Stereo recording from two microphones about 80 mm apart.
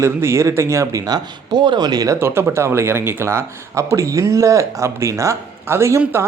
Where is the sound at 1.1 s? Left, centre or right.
Right.